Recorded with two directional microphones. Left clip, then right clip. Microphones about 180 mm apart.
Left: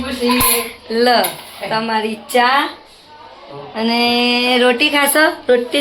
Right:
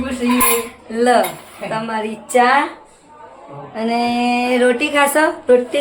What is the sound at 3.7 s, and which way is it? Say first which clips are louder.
Speech: left 3 dB; 10° left (ahead or behind).